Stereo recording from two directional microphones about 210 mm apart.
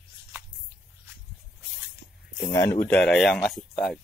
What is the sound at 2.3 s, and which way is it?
Speech, 15° left (ahead or behind).